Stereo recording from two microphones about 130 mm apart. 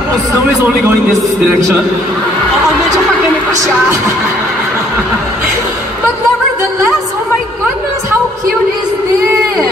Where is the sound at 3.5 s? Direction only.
25° right (ahead or behind).